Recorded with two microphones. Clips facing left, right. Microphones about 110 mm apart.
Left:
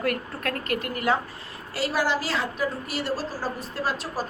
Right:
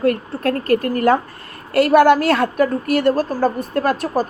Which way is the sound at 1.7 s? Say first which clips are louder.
Right 14 dB; 60° right (ahead or behind).